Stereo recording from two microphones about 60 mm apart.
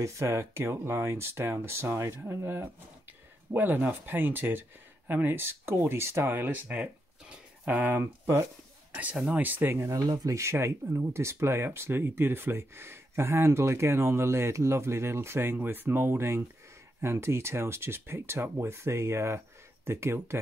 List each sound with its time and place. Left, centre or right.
0.0 s speech: right
7.6 s speech: right
9.3 s speech: right
9.8 s speech: right
10.4 s speech: right
15.5 s speech: right